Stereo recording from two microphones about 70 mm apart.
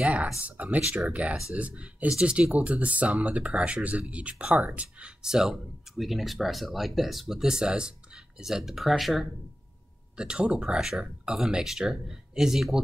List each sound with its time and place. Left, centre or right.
0.0 s speech: centre
10.1 s speech: centre